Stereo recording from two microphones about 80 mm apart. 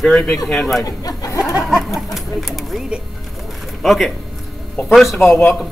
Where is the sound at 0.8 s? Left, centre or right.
Left.